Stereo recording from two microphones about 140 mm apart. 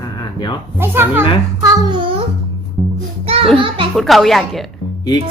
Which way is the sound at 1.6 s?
30° right (ahead or behind).